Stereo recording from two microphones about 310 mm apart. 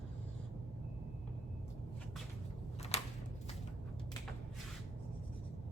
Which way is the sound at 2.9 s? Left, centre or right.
Left.